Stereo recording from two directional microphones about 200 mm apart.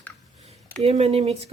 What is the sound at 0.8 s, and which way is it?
Speech, 30° right (ahead or behind).